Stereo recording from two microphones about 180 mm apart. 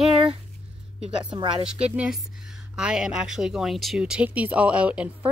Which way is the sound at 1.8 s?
5° right (ahead or behind).